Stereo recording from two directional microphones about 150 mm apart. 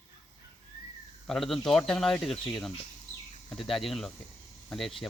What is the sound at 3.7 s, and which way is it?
Speech, centre (ahead or behind).